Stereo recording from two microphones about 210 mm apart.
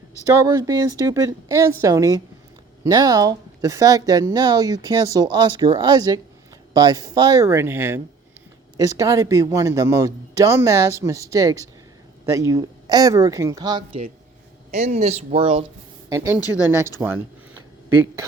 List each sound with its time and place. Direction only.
0.3 s a woman's voice: 15° right (ahead or behind)
14.7 s speech: 35° right (ahead or behind)
16.0 s a woman's voice: 10° right (ahead or behind)